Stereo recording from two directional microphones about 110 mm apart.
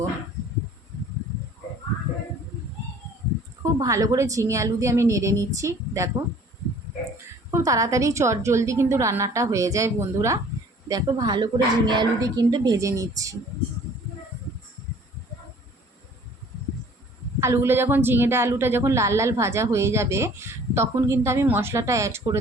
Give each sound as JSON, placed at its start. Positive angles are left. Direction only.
{"t": 3.6, "sound": "a woman's voice", "side_deg": -30}
{"t": 7.5, "sound": "a woman's voice", "side_deg": -30}
{"t": 17.4, "sound": "a woman's voice", "side_deg": -25}